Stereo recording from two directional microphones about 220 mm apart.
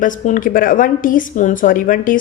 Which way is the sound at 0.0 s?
35° left (ahead or behind).